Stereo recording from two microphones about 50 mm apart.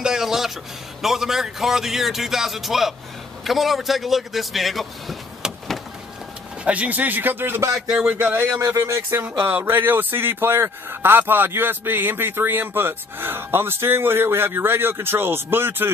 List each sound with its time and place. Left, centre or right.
0.0 s music: centre
1.0 s speech: centre
6.6 s speech: right
8.0 s speech: right
8.5 s speech: right
9.1 s a man's voice: right